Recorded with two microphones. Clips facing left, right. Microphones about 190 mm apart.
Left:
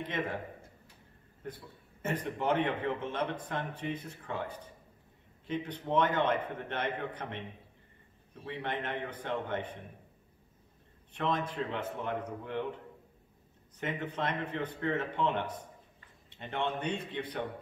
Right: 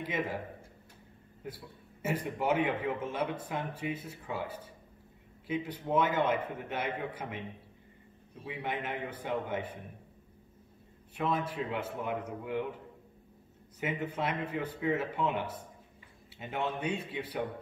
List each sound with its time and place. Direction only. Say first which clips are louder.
0.0 s a man's voice: right 1 dB; 5° right (ahead or behind)
1.4 s a man's voice: even; 10° right (ahead or behind)
8.5 s a man's voice: even; 10° right (ahead or behind)
11.1 s a man's voice: even; 5° right (ahead or behind)
13.7 s a man's voice: right 1 dB; 10° right (ahead or behind)